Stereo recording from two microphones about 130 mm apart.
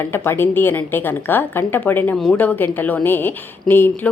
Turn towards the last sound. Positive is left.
turn(degrees=15)  # may be behind; listen again after turning